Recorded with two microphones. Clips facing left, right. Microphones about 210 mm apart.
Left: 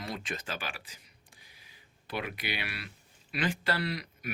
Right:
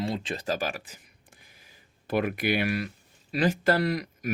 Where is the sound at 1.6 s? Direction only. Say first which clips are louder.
Right 3 dB; 45° right (ahead or behind).